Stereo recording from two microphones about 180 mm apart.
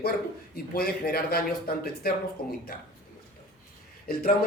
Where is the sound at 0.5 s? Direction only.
55° left (ahead or behind).